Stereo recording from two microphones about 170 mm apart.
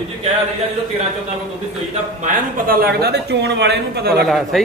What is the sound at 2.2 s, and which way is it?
Speech, 55° right (ahead or behind).